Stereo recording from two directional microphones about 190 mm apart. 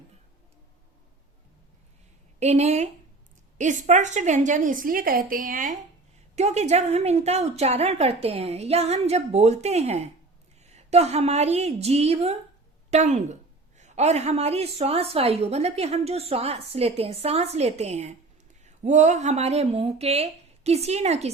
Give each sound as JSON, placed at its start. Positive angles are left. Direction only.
{"t": 2.4, "sound": "a woman's voice", "side_deg": -35}